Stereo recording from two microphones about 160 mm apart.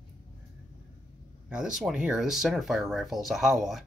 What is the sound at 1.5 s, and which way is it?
Speech, 5° right (ahead or behind).